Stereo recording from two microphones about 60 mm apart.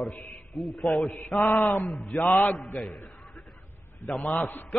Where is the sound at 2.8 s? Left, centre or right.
Centre.